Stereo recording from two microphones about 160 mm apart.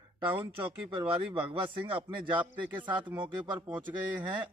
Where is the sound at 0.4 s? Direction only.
35° right (ahead or behind).